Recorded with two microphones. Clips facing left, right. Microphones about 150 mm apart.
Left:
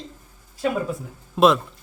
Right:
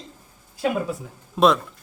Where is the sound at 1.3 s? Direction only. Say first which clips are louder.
Left 1 dB; centre (ahead or behind).